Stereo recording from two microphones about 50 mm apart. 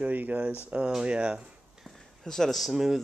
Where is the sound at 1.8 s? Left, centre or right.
Centre.